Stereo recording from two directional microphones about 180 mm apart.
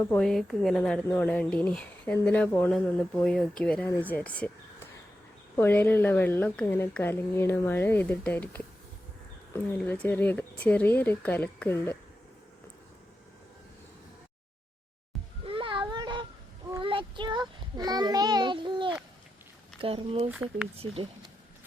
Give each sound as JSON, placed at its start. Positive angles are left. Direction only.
{"t": 0.0, "sound": "speech", "side_deg": 10}
{"t": 9.7, "sound": "speech", "side_deg": 5}
{"t": 15.4, "sound": "a sound", "side_deg": -30}
{"t": 16.8, "sound": "child singing", "side_deg": -30}
{"t": 19.8, "sound": "speech", "side_deg": -30}
{"t": 20.3, "sound": "speech", "side_deg": -5}